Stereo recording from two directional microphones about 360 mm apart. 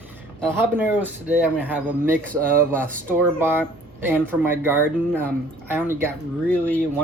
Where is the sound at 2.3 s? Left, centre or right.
Right.